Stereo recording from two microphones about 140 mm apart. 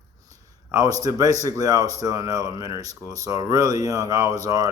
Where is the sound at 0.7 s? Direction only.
25° right (ahead or behind).